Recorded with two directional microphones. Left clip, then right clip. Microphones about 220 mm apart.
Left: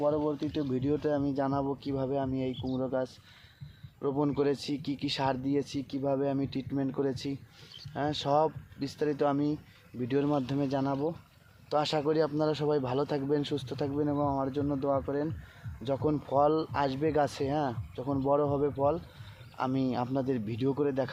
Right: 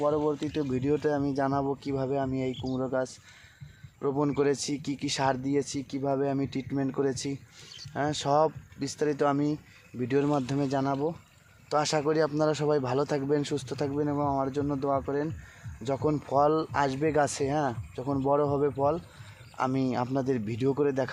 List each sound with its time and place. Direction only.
0.0 s speech: 25° right (ahead or behind)